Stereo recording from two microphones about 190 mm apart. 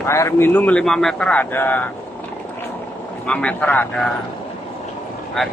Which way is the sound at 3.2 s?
10° left (ahead or behind).